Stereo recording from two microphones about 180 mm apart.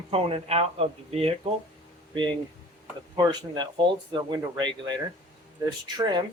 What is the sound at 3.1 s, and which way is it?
Speech, 25° right (ahead or behind).